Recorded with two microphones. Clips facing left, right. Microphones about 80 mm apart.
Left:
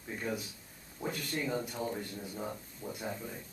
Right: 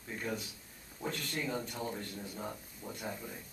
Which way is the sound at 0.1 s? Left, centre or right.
Centre.